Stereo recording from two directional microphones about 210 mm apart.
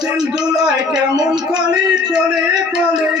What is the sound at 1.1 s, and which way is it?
Speech, 20° right (ahead or behind).